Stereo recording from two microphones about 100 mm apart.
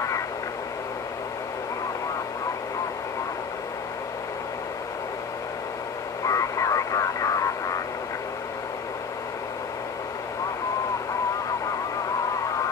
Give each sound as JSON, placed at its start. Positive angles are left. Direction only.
{"t": 6.2, "sound": "vehicle", "side_deg": 35}